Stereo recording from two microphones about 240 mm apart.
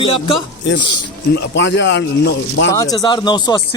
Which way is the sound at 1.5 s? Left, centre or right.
Left.